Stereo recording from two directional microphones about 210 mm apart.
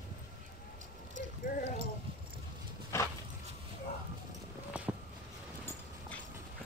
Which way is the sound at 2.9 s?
10° left (ahead or behind).